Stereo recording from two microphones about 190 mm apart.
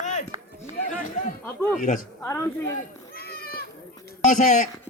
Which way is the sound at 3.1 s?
50° left (ahead or behind).